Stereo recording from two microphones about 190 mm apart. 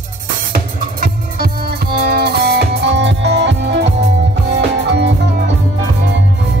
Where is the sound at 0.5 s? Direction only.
50° right (ahead or behind).